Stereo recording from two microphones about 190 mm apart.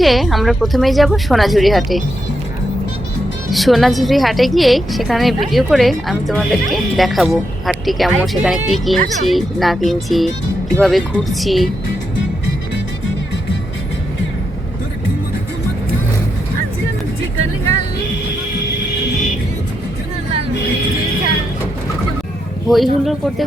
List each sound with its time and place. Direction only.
0.0 s a woman's voice: centre (ahead or behind)
3.5 s a woman's voice: centre (ahead or behind)
22.7 s a woman's voice: centre (ahead or behind)